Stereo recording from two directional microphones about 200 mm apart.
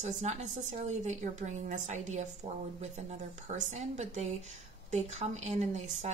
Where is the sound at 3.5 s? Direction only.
35° right (ahead or behind).